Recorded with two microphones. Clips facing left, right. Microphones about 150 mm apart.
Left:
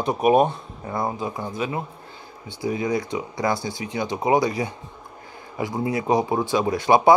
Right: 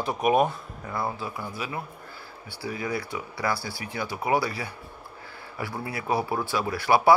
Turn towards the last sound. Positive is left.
turn(degrees=20)  # may be behind; listen again after turning